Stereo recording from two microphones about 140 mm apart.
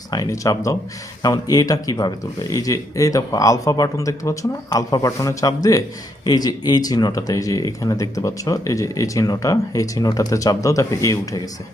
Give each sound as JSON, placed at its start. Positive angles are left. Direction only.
{"t": 0.1, "sound": "speech", "side_deg": 25}